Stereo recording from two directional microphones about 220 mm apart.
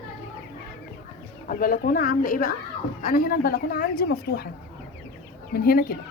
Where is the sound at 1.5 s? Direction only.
40° left (ahead or behind).